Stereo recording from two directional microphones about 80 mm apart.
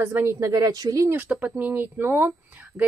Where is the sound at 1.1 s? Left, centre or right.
Right.